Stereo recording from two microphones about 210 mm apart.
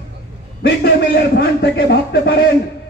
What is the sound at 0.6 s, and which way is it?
A man's voice, 50° left (ahead or behind).